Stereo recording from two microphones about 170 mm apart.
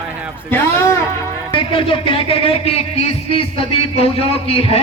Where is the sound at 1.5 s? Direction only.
30° left (ahead or behind).